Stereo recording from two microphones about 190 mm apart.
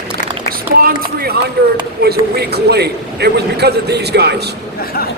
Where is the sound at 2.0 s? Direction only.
60° right (ahead or behind).